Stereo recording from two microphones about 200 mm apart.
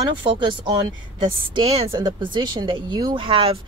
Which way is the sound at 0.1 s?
25° right (ahead or behind).